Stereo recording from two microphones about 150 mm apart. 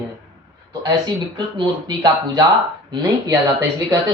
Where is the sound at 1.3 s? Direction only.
30° right (ahead or behind).